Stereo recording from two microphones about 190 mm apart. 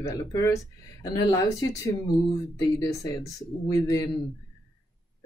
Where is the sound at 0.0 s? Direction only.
20° left (ahead or behind).